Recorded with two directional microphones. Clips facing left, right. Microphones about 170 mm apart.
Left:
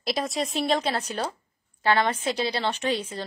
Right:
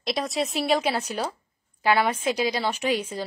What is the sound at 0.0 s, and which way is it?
A woman's voice, centre (ahead or behind).